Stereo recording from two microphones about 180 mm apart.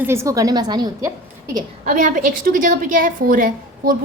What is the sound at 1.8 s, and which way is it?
A woman's voice, 45° right (ahead or behind).